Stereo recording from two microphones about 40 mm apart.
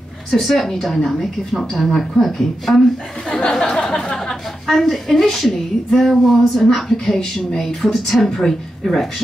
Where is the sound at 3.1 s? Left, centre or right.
Centre.